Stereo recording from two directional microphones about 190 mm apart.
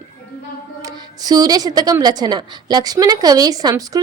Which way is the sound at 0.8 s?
20° right (ahead or behind).